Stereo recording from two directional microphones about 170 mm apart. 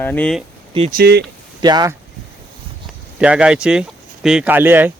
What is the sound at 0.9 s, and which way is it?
Speech, 70° right (ahead or behind).